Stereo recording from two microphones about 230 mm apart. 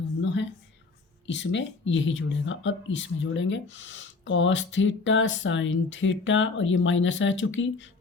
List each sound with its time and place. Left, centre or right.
1.3 s speech: left